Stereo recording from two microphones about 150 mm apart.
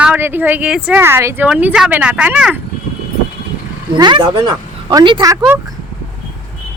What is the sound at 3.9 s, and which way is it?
Speech, 30° right (ahead or behind).